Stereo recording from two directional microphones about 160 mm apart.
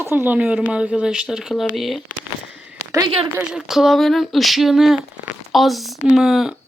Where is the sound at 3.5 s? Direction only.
5° right (ahead or behind).